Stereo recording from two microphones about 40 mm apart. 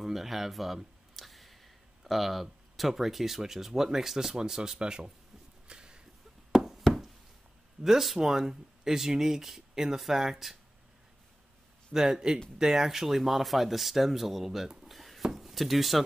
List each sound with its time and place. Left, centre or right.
0.0 s speech: centre; by 5.1 s right
5.7 s a sound: right
6.5 s knock: centre
7.8 s speech: centre
11.9 s speech: centre
15.3 s a sound: centre